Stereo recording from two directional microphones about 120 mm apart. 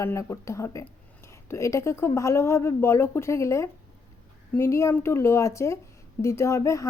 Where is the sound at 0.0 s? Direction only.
25° left (ahead or behind).